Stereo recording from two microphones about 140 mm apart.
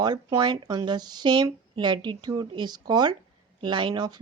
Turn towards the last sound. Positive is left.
turn(degrees=-30)  # may be behind; listen again after turning